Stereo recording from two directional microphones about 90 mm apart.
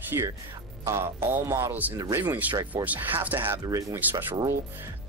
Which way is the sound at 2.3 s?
20° right (ahead or behind).